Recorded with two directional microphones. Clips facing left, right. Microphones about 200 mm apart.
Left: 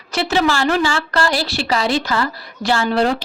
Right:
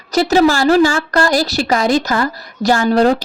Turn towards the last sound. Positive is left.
turn(degrees=-40)  # may be behind; listen again after turning